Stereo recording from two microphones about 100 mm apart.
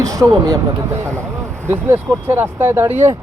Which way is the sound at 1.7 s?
20° right (ahead or behind).